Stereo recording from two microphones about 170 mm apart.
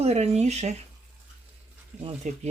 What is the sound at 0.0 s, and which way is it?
Speech, 40° right (ahead or behind).